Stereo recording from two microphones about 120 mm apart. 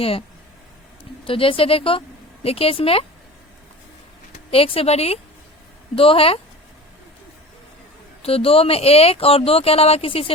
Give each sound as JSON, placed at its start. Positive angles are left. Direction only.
{"t": 0.0, "sound": "a woman's voice", "side_deg": 50}
{"t": 4.5, "sound": "speech", "side_deg": 50}
{"t": 8.2, "sound": "speech", "side_deg": 55}